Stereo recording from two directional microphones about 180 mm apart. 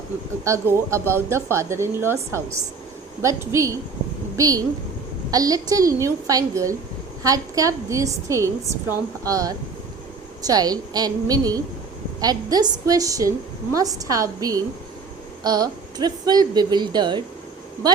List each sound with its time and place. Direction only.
0.4 s a woman's voice: 15° right (ahead or behind)